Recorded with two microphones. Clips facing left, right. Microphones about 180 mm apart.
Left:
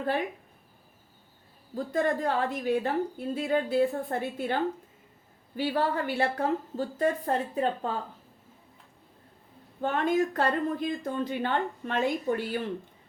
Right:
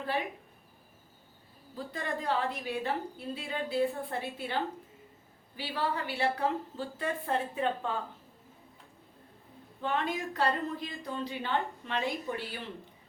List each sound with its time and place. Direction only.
1.7 s a woman's voice: 45° left (ahead or behind)
9.8 s a woman's voice: 45° left (ahead or behind)